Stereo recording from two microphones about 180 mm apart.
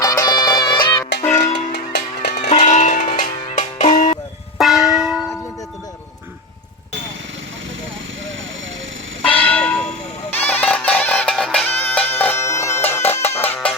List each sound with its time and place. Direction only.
0.0 s music: 20° left (ahead or behind)
1.7 s music: 70° left (ahead or behind)
2.5 s church bell: 40° left (ahead or behind)
3.2 s music: 40° left (ahead or behind)
4.5 s church bell: centre (ahead or behind)
9.2 s church bell: 10° left (ahead or behind)
10.4 s music: 10° left (ahead or behind)